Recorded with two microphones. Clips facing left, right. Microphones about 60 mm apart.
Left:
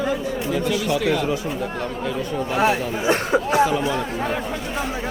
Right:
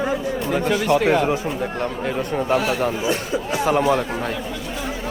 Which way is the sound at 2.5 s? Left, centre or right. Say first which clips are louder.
Left 2 dB; left.